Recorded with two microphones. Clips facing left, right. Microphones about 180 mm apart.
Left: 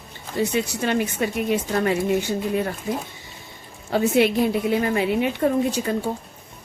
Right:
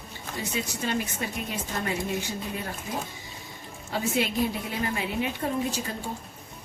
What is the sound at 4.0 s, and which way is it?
A woman's voice, 65° left (ahead or behind).